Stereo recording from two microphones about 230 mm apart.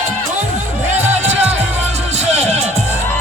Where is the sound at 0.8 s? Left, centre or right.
Right.